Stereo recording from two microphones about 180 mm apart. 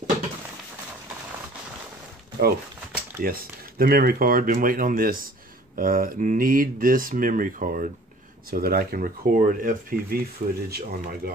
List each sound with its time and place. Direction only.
2.4 s speech: 55° right (ahead or behind)